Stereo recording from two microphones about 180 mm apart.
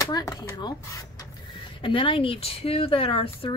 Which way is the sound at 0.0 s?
20° left (ahead or behind).